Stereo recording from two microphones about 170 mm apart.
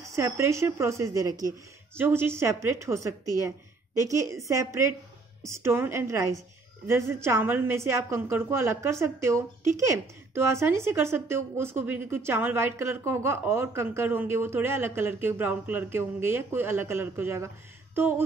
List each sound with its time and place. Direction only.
0.0 s a woman's voice: 15° right (ahead or behind)